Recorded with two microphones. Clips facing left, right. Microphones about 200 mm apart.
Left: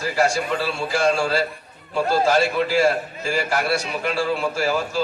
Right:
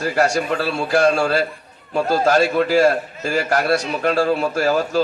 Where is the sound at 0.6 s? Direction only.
60° right (ahead or behind).